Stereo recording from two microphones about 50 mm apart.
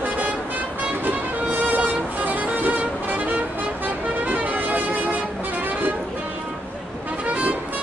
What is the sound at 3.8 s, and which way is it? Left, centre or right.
Music, right.